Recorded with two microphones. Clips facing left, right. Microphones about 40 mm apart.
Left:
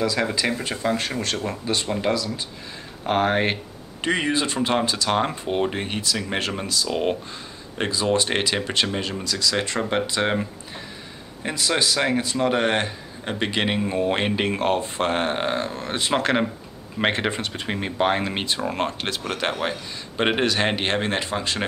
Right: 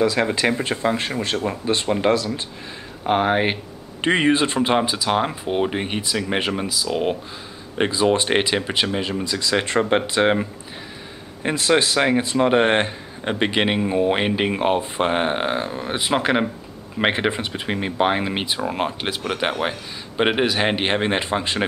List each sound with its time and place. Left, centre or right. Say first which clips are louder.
0.0 s speech: right 4 dB; right
1.7 s speech: right 5 dB; right
3.0 s speech: right 2 dB; centre
4.0 s speech: right 5 dB; right
4.6 s speech: right 3 dB; centre
7.7 s speech: right 4 dB; right
9.2 s speech: even; right
11.4 s speech: right 4 dB; right